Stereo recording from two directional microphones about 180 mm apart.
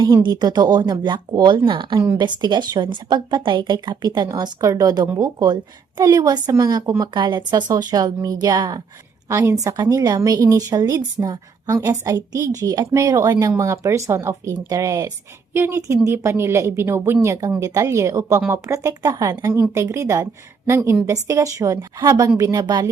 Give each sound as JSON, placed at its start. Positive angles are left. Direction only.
{"t": 0.0, "sound": "a woman's voice", "side_deg": -25}